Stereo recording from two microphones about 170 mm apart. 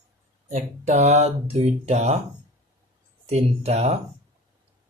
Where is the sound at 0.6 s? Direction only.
40° right (ahead or behind).